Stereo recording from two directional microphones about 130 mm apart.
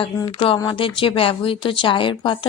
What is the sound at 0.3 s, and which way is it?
Speech, 45° left (ahead or behind).